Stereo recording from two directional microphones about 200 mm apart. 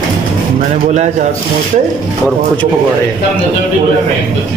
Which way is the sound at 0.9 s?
35° right (ahead or behind).